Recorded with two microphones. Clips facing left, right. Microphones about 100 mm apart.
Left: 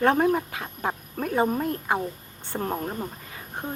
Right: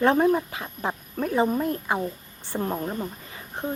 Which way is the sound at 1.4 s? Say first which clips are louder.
Even; 10° left (ahead or behind).